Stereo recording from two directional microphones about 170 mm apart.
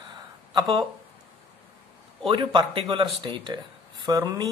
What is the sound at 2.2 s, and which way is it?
Speech, 30° right (ahead or behind).